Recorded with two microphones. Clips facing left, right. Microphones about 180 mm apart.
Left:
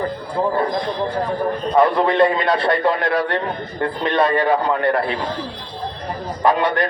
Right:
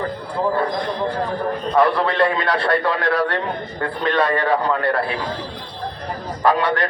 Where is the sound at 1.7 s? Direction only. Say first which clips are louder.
Left 2 dB; 20° left (ahead or behind).